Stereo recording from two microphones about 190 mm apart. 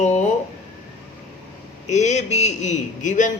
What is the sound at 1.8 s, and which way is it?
A man's voice, 40° left (ahead or behind).